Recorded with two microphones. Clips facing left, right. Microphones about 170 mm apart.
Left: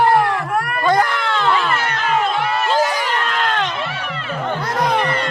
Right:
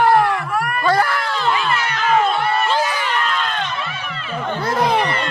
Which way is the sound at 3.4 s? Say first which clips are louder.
Left 3 dB; 75° left (ahead or behind).